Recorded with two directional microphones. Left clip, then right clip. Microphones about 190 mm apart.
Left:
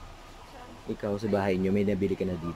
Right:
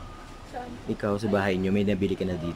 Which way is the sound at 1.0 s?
5° right (ahead or behind).